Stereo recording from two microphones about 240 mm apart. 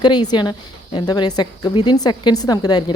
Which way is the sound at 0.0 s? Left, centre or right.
Centre.